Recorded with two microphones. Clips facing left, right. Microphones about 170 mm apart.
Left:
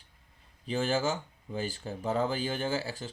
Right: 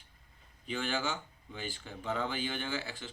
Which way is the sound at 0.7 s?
40° left (ahead or behind).